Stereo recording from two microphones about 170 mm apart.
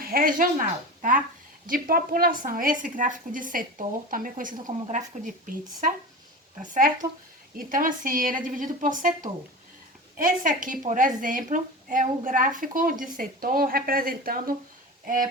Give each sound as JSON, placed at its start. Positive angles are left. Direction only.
{"t": 0.0, "sound": "speech", "side_deg": -60}
{"t": 1.6, "sound": "a woman's voice", "side_deg": -55}